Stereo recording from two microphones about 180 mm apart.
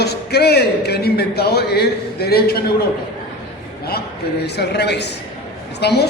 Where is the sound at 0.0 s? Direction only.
60° left (ahead or behind).